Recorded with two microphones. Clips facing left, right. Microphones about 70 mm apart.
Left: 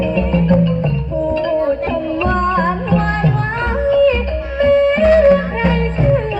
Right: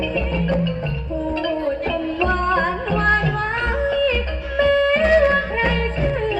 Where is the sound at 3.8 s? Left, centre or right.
Left.